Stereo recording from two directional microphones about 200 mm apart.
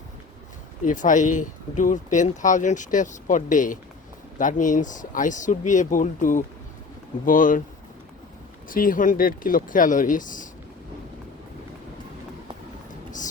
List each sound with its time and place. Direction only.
0.9 s speech: 40° left (ahead or behind)
8.7 s speech: 45° left (ahead or behind)
12.9 s a sound: 40° left (ahead or behind)